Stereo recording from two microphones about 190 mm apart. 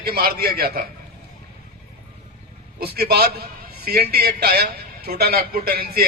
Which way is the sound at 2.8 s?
55° right (ahead or behind).